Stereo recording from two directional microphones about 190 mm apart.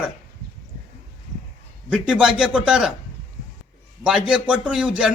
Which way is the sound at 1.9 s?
5° right (ahead or behind).